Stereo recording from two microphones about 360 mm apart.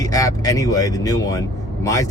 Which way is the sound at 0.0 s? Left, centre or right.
Centre.